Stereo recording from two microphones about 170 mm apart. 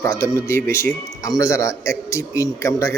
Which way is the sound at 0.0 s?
15° left (ahead or behind).